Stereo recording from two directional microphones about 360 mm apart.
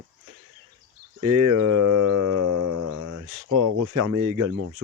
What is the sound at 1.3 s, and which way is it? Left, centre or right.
Speech, right.